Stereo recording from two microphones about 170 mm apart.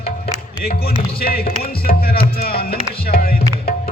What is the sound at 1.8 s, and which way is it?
Music, 65° left (ahead or behind).